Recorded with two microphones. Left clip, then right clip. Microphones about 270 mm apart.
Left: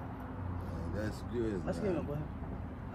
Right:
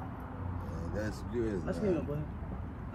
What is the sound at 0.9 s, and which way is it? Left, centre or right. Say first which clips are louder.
Speech: right 2 dB; centre.